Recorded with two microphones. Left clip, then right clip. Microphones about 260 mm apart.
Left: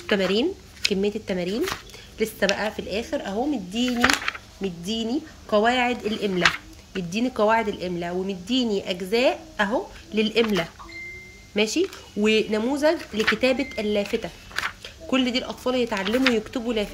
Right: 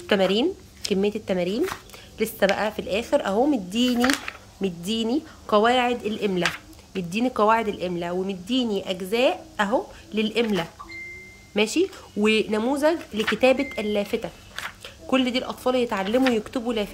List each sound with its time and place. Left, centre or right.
0.0 s speech: centre
4.8 s speech: right
5.5 s speech: centre